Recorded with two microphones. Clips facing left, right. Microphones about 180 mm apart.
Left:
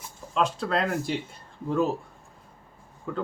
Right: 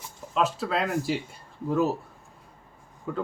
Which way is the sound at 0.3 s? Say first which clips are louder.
Even; 5° right (ahead or behind).